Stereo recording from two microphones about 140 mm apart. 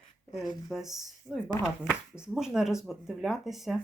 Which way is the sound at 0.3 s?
Centre (ahead or behind).